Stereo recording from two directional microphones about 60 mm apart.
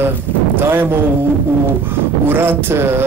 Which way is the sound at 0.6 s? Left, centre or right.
Right.